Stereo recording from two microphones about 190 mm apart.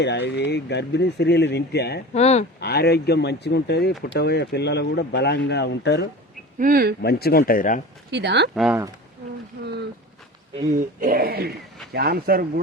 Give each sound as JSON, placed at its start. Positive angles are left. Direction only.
{"t": 0.0, "sound": "speech", "side_deg": 65}
{"t": 2.1, "sound": "speech", "side_deg": 35}
{"t": 2.6, "sound": "speech", "side_deg": 55}
{"t": 6.6, "sound": "speech", "side_deg": -50}
{"t": 7.0, "sound": "speech", "side_deg": 55}
{"t": 8.1, "sound": "speech", "side_deg": -65}
{"t": 8.5, "sound": "speech", "side_deg": 0}
{"t": 11.0, "sound": "speech", "side_deg": -50}